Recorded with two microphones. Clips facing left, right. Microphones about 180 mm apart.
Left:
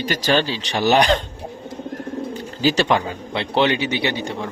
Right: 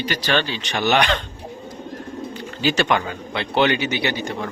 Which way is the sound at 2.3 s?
35° left (ahead or behind).